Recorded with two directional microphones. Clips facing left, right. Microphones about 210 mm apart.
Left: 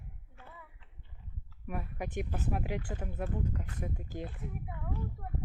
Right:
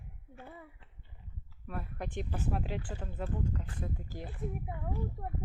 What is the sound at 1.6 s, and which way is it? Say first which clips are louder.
Speech: left 2 dB; 15° left (ahead or behind).